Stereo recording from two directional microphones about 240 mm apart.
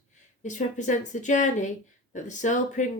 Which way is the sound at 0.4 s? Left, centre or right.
Left.